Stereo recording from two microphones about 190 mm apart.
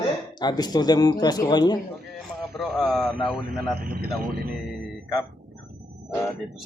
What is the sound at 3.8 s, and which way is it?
Speech, 55° right (ahead or behind).